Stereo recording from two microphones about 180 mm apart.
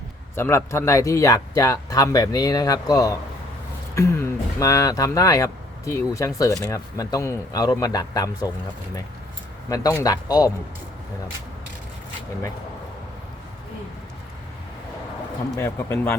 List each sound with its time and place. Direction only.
0.3 s speech: 15° left (ahead or behind)
9.6 s speech: 20° left (ahead or behind)
15.5 s speech: 15° left (ahead or behind)